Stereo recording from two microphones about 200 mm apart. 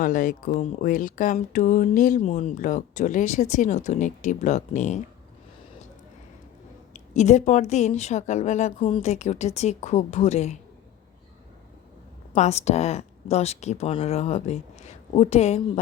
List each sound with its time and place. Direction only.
0.0 s speech: 45° left (ahead or behind)
6.9 s speech: 35° left (ahead or behind)
12.3 s speech: 35° left (ahead or behind)